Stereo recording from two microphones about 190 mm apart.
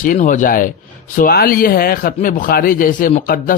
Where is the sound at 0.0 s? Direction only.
45° left (ahead or behind).